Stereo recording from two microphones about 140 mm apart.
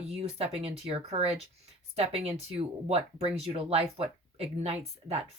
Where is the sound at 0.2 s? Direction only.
45° right (ahead or behind).